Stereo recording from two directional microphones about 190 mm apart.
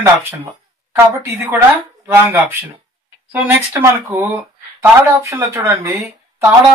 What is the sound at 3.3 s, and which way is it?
Speech, 10° right (ahead or behind).